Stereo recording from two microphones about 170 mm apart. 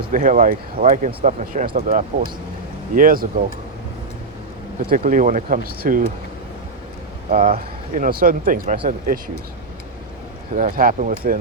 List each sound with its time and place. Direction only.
0.0 s speech: 50° right (ahead or behind)
2.9 s speech: 55° right (ahead or behind)
4.9 s speech: 50° right (ahead or behind)
7.3 s speech: 55° right (ahead or behind)
10.5 s speech: 55° right (ahead or behind)